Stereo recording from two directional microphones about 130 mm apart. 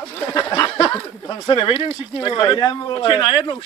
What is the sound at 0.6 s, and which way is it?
Speech, 25° left (ahead or behind).